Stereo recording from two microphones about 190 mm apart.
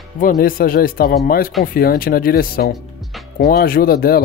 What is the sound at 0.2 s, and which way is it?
Speech, 45° left (ahead or behind).